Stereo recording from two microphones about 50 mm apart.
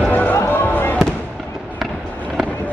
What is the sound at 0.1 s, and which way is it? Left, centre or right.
Run, left.